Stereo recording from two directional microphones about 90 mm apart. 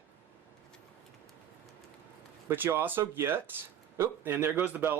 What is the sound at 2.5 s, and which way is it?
Speech, 25° right (ahead or behind).